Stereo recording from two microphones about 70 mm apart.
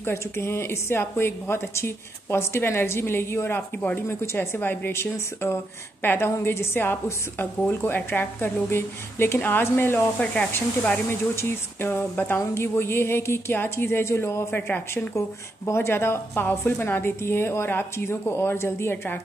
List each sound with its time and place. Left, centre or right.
0.0 s a woman's voice: left
3.5 s speech: left
4.1 s a woman's voice: left
4.6 s a woman's voice: left
14.5 s speech: left
15.1 s a woman's voice: left